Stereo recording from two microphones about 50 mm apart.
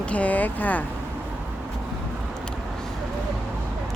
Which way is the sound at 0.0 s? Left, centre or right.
Left.